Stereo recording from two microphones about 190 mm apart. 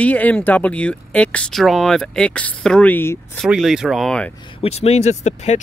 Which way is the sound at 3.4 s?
5° right (ahead or behind).